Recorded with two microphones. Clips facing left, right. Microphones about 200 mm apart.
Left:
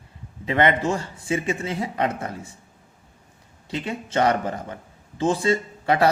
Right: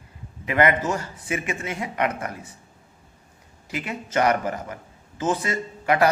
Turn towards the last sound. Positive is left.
turn(degrees=30)  # may be behind; listen again after turning